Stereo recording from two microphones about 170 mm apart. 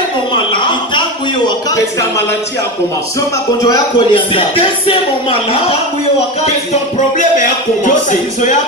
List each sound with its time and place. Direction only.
0.3 s a sound: 30° left (ahead or behind)
3.6 s speech: 25° left (ahead or behind)
6.7 s music: 45° left (ahead or behind)